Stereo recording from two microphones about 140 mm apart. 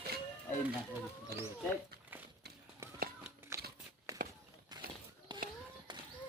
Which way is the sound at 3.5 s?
20° right (ahead or behind).